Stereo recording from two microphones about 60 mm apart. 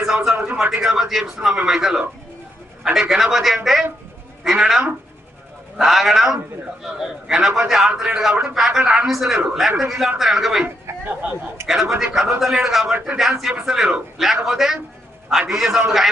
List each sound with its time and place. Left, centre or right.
0.0 s a man's voice: centre
11.2 s speech: right
11.7 s a man's voice: centre